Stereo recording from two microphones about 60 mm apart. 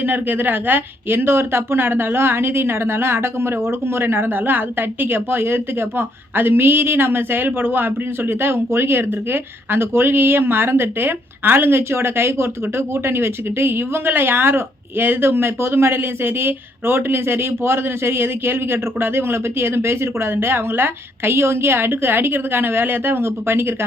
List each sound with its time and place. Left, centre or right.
0.0 s a woman's voice: right